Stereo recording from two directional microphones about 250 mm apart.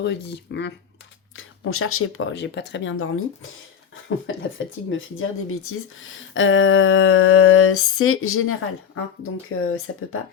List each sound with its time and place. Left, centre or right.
0.0 s speech: left
1.4 s speech: left